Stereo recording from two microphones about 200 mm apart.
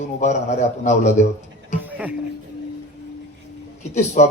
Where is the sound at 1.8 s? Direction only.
5° right (ahead or behind).